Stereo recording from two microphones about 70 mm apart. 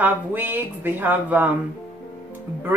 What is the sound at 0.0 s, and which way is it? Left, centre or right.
Speech, right.